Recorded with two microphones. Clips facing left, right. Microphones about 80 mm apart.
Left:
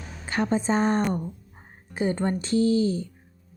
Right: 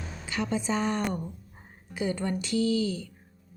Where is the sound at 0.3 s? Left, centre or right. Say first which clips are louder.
Left 5 dB; left.